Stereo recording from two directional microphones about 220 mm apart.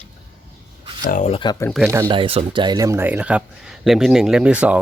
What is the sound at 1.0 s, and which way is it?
Speech, 35° left (ahead or behind).